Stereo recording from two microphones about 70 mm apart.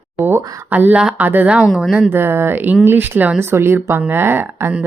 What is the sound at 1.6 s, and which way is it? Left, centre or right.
Speech, centre.